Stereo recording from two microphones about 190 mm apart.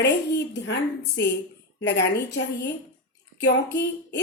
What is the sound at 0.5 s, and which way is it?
A woman's voice, 65° left (ahead or behind).